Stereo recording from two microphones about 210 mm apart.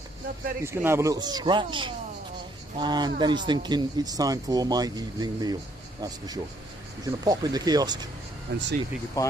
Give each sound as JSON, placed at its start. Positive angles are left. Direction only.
{"t": 0.6, "sound": "speech", "side_deg": -10}
{"t": 8.5, "sound": "speech", "side_deg": -55}
{"t": 9.2, "sound": "speech", "side_deg": 15}